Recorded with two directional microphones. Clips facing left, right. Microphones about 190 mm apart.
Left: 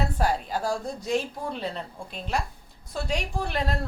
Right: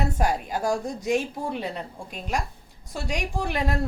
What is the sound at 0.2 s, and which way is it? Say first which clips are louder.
A woman's voice: right 1 dB; 15° right (ahead or behind).